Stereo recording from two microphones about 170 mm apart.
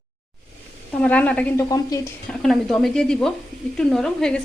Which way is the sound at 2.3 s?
Centre (ahead or behind).